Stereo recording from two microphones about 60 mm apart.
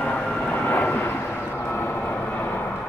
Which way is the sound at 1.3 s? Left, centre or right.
Left.